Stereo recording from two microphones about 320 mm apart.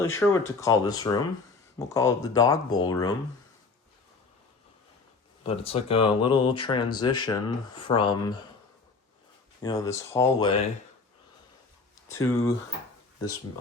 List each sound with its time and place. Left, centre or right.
0.0 s speech: centre
5.4 s speech: centre
9.6 s speech: centre
12.0 s speech: left